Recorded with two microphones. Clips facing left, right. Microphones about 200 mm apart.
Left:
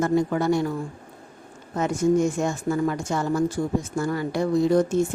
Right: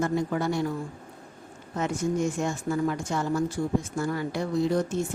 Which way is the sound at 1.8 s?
45° left (ahead or behind).